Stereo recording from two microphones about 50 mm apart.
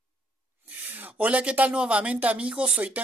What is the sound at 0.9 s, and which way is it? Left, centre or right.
Speech, right.